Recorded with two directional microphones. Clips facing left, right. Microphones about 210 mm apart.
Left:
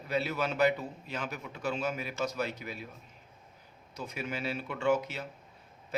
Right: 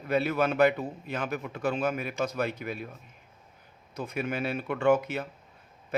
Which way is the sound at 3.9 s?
55° right (ahead or behind).